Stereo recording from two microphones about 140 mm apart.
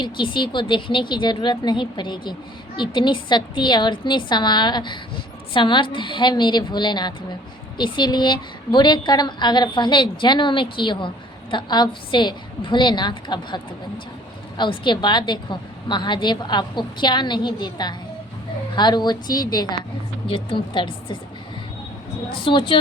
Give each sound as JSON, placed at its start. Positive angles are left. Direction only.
{"t": 0.0, "sound": "a woman's voice", "side_deg": 35}
{"t": 14.6, "sound": "a woman's voice", "side_deg": 35}
{"t": 20.2, "sound": "a woman's voice", "side_deg": 40}
{"t": 22.4, "sound": "a woman's voice", "side_deg": 40}